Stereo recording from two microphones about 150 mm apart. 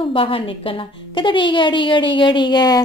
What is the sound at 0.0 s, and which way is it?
A woman's voice, 35° left (ahead or behind).